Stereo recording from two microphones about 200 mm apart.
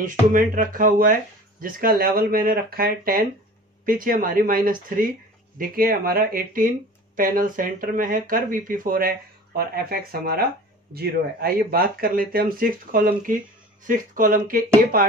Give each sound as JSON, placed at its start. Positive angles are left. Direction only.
{"t": 0.3, "sound": "speech", "side_deg": -45}